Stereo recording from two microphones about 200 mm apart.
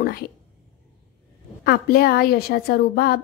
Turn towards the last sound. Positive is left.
turn(degrees=50)  # may be behind; listen again after turning